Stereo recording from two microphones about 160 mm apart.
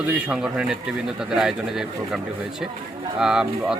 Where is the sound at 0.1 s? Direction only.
5° right (ahead or behind).